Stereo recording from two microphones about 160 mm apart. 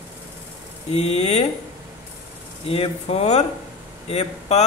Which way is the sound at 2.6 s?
40° left (ahead or behind).